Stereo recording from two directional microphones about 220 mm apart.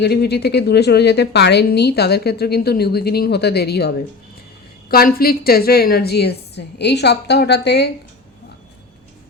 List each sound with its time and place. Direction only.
0.0 s a woman's voice: 50° left (ahead or behind)